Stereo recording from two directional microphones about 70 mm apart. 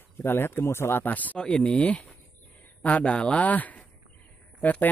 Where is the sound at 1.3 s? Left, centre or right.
Centre.